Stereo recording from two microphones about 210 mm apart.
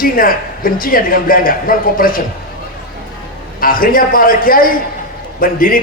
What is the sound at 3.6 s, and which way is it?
Speech, 40° left (ahead or behind).